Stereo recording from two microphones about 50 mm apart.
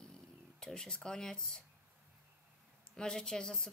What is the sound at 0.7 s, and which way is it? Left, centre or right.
Speech, centre.